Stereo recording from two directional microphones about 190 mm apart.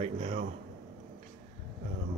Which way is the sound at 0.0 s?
35° right (ahead or behind).